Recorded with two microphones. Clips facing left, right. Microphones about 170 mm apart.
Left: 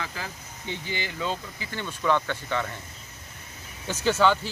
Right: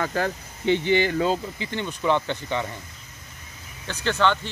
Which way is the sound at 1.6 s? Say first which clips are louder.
Right 3 dB; 20° right (ahead or behind).